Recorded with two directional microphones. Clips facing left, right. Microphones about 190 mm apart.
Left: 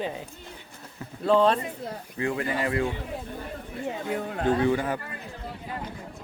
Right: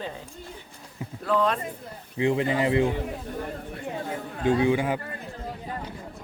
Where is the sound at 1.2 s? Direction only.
30° left (ahead or behind).